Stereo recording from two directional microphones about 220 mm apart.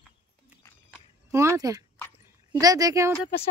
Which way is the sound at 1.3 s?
15° right (ahead or behind).